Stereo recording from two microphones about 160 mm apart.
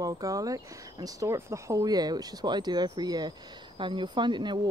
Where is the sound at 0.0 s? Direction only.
20° right (ahead or behind).